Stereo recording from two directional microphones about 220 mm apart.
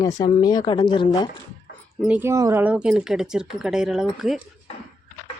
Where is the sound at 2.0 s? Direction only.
5° right (ahead or behind).